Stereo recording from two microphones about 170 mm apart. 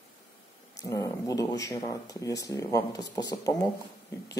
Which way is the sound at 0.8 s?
20° left (ahead or behind).